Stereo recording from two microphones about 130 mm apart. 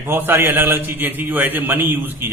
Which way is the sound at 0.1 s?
15° right (ahead or behind).